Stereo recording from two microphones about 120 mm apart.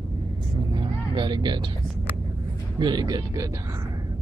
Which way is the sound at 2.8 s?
35° right (ahead or behind).